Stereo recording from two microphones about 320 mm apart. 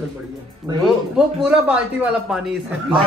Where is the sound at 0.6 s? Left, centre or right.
Centre.